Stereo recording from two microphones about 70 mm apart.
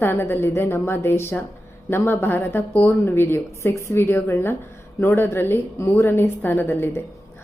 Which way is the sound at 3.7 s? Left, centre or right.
Left.